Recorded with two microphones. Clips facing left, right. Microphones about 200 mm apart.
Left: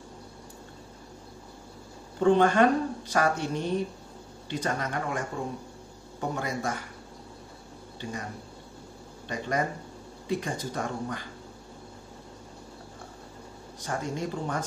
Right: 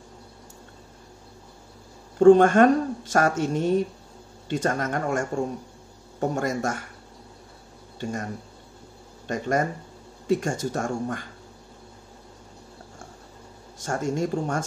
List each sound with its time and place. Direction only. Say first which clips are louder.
2.1 s speech: right 7 dB; 50° right (ahead or behind)
8.0 s speech: right 6 dB; 50° right (ahead or behind)
9.3 s speech: right 5 dB; 45° right (ahead or behind)
13.8 s speech: right 6 dB; 45° right (ahead or behind)